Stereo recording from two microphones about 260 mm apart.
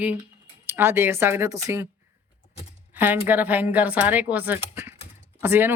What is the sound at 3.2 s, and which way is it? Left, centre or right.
Speech, centre.